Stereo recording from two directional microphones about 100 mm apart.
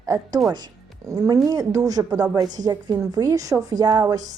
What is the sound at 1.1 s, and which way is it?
A woman's voice, 35° right (ahead or behind).